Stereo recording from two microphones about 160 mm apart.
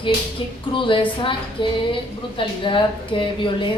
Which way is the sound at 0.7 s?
30° left (ahead or behind).